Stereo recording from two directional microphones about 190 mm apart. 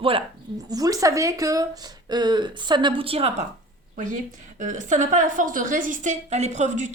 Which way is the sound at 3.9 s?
45° right (ahead or behind).